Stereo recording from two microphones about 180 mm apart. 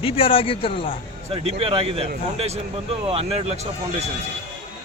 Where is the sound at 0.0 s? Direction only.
30° left (ahead or behind).